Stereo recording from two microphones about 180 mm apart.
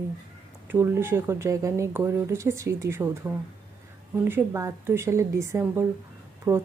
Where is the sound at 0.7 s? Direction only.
15° right (ahead or behind).